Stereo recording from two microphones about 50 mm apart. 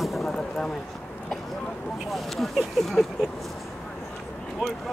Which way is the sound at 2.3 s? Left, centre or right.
Centre.